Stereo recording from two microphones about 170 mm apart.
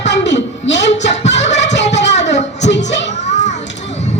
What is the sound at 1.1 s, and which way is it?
Child singing, 40° left (ahead or behind).